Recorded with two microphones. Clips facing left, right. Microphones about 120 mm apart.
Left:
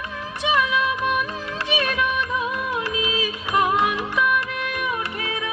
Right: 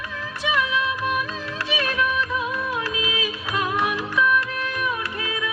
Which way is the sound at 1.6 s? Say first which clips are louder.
Left 3 dB; 20° left (ahead or behind).